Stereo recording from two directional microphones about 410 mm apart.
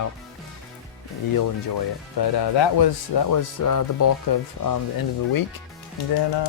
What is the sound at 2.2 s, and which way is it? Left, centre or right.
Speech, left.